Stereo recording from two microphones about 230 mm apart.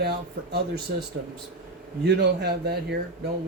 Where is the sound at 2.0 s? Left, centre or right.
Right.